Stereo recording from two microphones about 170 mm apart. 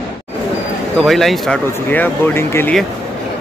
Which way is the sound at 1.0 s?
Centre (ahead or behind).